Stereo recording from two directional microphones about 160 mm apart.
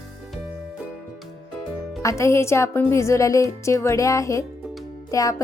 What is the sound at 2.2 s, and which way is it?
A woman's voice, 15° left (ahead or behind).